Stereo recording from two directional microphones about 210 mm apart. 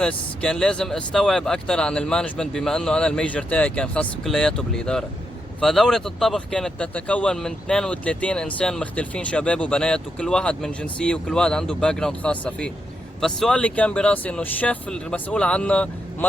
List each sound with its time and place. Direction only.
0.0 s speech: 5° left (ahead or behind)